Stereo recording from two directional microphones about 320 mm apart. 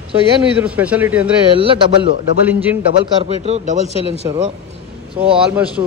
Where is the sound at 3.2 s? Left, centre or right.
Centre.